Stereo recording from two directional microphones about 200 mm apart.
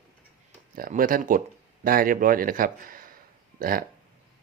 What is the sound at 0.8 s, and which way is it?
Speech, 45° right (ahead or behind).